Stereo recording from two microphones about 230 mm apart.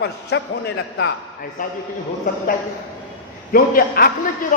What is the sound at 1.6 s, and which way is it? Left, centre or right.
Speech, left.